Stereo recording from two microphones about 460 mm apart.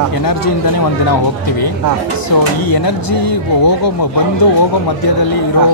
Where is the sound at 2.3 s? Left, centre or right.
Left.